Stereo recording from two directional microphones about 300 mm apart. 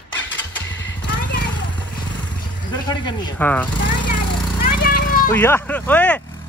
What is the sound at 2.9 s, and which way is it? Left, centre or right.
Speech, centre.